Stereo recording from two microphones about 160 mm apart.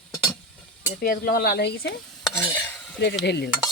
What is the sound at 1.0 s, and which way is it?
Speech, 65° left (ahead or behind).